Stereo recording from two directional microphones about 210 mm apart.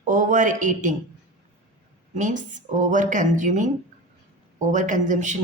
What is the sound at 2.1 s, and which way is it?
A woman's voice, 35° right (ahead or behind).